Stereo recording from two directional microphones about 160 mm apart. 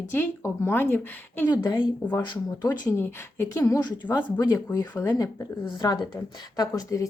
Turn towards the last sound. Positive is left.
turn(degrees=20)  # may be behind; listen again after turning